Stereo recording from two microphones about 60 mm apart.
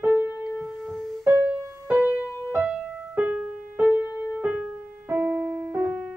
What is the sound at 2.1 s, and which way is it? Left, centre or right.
Music, left.